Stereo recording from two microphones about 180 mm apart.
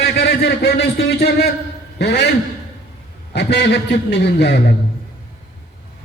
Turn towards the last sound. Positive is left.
turn(degrees=70)  # may be behind; listen again after turning